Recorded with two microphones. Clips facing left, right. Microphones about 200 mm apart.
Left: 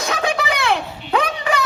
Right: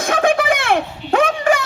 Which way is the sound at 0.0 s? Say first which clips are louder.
Right 5 dB; 50° right (ahead or behind).